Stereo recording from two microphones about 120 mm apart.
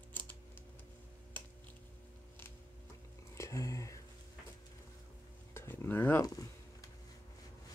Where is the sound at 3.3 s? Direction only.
25° left (ahead or behind).